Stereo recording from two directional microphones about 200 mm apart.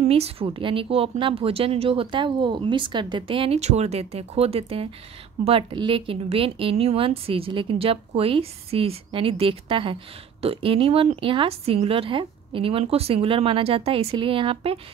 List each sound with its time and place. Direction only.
0.0 s speech: 30° right (ahead or behind)